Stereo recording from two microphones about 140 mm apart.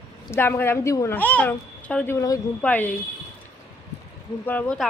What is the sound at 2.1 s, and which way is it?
Speech, 25° left (ahead or behind).